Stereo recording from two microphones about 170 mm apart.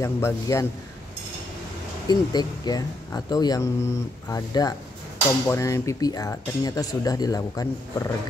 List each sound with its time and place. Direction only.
0.0 s a man's voice: 15° left (ahead or behind)
2.0 s speech: 25° left (ahead or behind)